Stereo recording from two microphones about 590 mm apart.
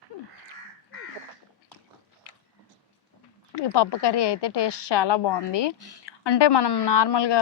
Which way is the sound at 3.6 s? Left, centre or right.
Left.